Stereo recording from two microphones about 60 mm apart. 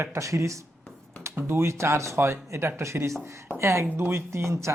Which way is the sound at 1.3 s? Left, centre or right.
Right.